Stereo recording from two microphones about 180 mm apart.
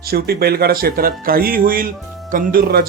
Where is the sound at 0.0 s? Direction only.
60° right (ahead or behind).